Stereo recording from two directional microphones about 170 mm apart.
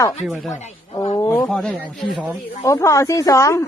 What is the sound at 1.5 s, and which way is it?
Speech, 5° left (ahead or behind).